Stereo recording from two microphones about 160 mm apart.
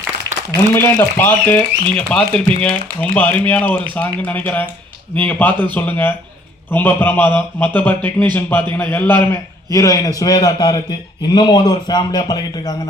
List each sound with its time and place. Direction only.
0.5 s speech: 15° left (ahead or behind)